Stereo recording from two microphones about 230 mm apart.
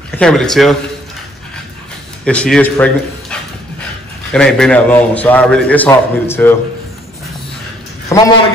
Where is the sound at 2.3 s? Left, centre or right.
Centre.